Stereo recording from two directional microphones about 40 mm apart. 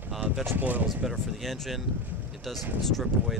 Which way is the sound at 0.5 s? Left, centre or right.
Right.